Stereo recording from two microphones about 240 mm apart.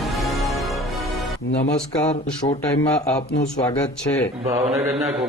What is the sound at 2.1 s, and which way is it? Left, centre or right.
Speech, left.